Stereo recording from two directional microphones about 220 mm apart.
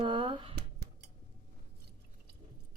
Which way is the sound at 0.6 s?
50° right (ahead or behind).